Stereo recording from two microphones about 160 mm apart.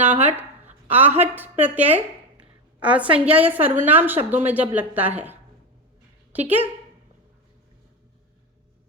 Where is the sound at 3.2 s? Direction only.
10° right (ahead or behind).